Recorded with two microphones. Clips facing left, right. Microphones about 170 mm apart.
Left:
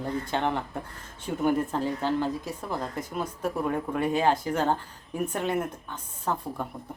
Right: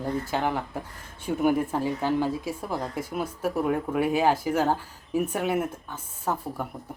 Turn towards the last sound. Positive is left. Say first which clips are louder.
# right 1 dB
turn(degrees=-5)  # may be behind; listen again after turning